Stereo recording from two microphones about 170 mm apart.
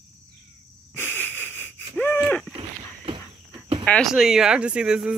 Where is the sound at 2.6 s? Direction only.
30° right (ahead or behind).